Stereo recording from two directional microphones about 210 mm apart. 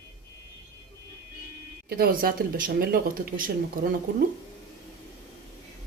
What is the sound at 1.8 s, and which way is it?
Speech, 45° right (ahead or behind).